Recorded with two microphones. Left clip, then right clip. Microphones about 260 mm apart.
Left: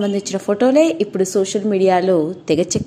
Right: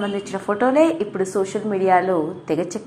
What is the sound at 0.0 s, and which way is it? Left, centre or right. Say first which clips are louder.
A woman's voice: left 4 dB; left.